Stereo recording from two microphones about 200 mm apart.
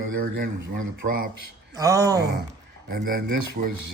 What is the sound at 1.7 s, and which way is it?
Speech, 15° right (ahead or behind).